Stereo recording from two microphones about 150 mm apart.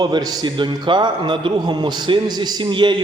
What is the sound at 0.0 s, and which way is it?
A man's voice, 25° right (ahead or behind).